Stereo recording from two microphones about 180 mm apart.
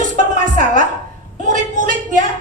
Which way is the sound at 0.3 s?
45° right (ahead or behind).